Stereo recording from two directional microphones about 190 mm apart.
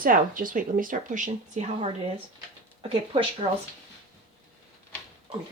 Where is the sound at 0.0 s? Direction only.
45° right (ahead or behind).